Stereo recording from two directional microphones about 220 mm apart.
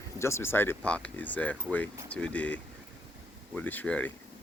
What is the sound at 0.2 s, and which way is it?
Speech, 10° left (ahead or behind).